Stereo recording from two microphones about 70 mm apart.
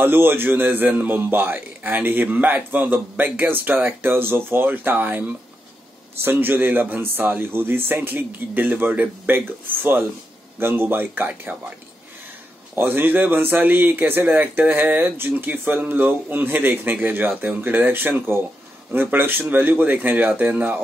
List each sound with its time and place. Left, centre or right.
0.0 s a man's voice: right
10.6 s speech: right
12.7 s a man's voice: right